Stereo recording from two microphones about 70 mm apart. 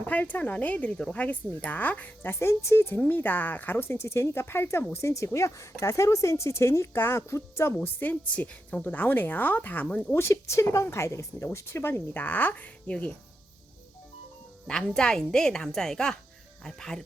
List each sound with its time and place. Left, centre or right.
0.0 s speech: left
2.3 s speech: left
7.8 s a woman's voice: left
10.2 s speech: left; by 13.1 s centre
14.7 s a woman's voice: centre